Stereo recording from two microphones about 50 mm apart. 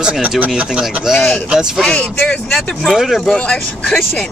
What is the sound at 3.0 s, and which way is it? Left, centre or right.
Speech, centre.